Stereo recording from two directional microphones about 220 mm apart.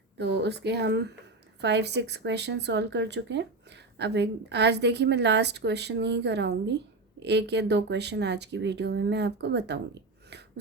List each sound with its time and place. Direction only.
0.2 s speech: 50° right (ahead or behind)